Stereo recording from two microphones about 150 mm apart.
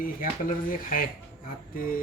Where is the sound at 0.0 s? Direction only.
70° left (ahead or behind).